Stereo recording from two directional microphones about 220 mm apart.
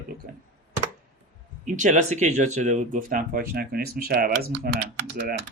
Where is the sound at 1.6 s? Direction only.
35° right (ahead or behind).